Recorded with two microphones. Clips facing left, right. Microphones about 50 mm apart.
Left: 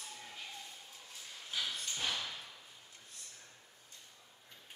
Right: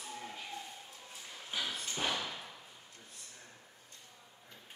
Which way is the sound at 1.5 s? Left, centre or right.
Centre.